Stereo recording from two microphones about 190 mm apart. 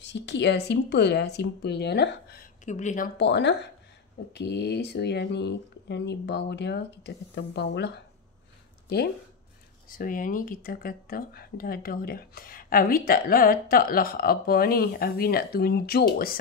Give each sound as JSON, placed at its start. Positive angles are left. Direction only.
{"t": 0.0, "sound": "speech", "side_deg": 65}
{"t": 2.6, "sound": "speech", "side_deg": 40}
{"t": 3.2, "sound": "speech", "side_deg": 65}
{"t": 9.8, "sound": "speech", "side_deg": 45}